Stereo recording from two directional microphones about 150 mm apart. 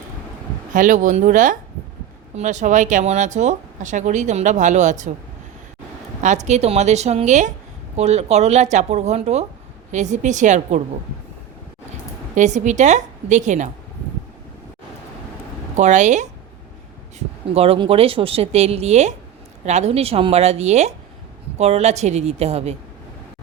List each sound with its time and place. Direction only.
0.7 s speech: 60° right (ahead or behind)
6.2 s speech: 50° right (ahead or behind)
12.3 s a woman's voice: 55° right (ahead or behind)
15.7 s a woman's voice: 50° right (ahead or behind)
17.2 s speech: 40° right (ahead or behind)